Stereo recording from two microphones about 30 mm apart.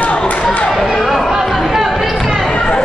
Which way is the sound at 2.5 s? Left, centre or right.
Left.